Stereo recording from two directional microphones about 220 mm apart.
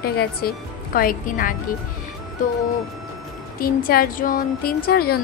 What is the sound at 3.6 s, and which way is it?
Speech, 40° left (ahead or behind).